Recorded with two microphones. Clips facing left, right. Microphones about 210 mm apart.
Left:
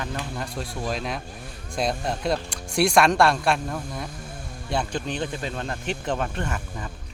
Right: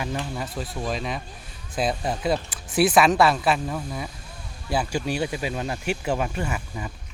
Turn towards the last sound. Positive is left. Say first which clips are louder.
# right 1 dB
turn(degrees=-10)  # may be behind; listen again after turning